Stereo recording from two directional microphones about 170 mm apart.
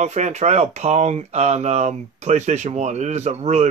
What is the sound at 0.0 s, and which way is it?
Speech, 40° right (ahead or behind).